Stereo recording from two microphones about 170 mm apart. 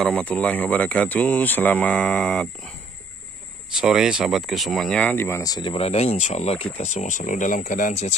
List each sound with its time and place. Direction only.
0.0 s speech: 5° left (ahead or behind)
3.7 s speech: 5° right (ahead or behind); by 8.1 s 45° left (ahead or behind)